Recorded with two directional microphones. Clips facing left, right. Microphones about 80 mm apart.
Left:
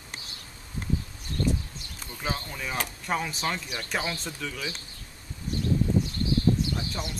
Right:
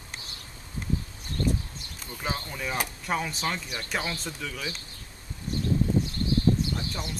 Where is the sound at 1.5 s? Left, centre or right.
Right.